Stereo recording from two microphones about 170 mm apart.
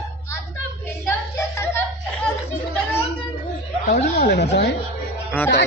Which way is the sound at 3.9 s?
75° left (ahead or behind).